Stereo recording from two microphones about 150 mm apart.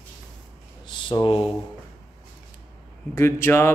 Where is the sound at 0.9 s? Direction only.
30° left (ahead or behind).